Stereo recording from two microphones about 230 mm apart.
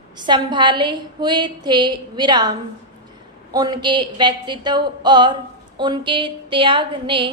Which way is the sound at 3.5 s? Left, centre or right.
Centre.